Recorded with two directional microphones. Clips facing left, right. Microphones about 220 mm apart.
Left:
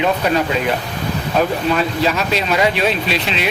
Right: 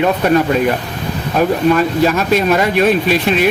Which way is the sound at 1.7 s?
50° right (ahead or behind).